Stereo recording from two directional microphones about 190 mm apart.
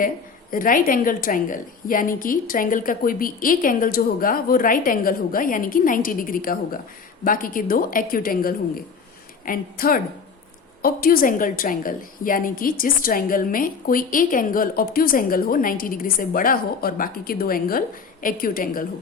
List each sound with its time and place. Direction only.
0.5 s a woman's voice: 45° left (ahead or behind)